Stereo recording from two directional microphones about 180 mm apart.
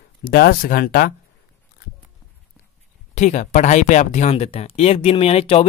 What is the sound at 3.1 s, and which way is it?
Speech, 40° left (ahead or behind).